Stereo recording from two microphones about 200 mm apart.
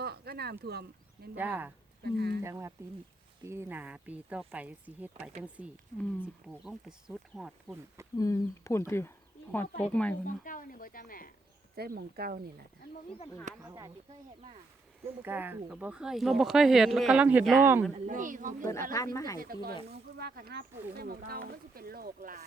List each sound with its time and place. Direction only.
0.0 s a sound: 55° right (ahead or behind)
0.6 s speech: 55° right (ahead or behind)
1.4 s speech: 10° right (ahead or behind)
2.0 s speech: 55° right (ahead or behind)
2.4 s speech: 15° right (ahead or behind)
8.2 s speech: 15° left (ahead or behind)
10.2 s speech: 40° left (ahead or behind)
11.8 s speech: 50° right (ahead or behind)
13.7 s speech: 15° right (ahead or behind)
15.2 s speech: 10° right (ahead or behind)
18.0 s speech: 40° right (ahead or behind)
18.6 s speech: 15° left (ahead or behind)
19.4 s speech: 45° right (ahead or behind)